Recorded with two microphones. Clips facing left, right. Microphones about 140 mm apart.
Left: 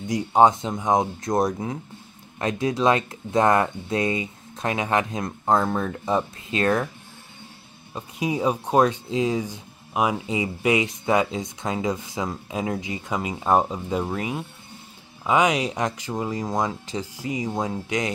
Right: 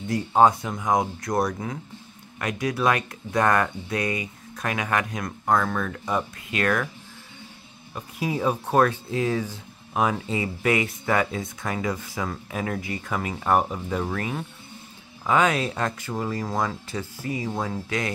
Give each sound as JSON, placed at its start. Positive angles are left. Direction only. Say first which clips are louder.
{"t": 0.0, "sound": "speech", "louder": "left 1 dB", "side_deg": 15}
{"t": 7.9, "sound": "speech", "louder": "left 2 dB", "side_deg": 15}